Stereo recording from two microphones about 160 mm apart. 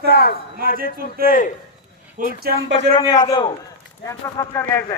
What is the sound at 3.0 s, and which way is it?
Speech, 25° left (ahead or behind).